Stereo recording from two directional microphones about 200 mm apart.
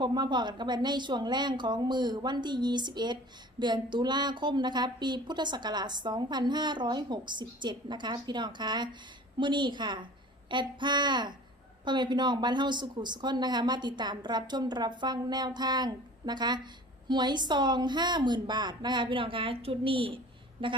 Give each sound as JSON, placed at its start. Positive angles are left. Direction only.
{"t": 0.0, "sound": "a woman's voice", "side_deg": -20}